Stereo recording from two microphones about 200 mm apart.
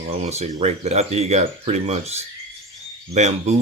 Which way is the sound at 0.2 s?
35° right (ahead or behind).